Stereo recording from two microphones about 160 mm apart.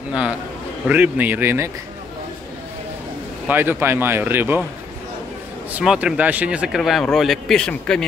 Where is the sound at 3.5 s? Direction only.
15° right (ahead or behind).